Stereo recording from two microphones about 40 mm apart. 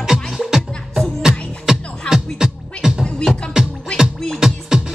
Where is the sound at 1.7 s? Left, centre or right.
Centre.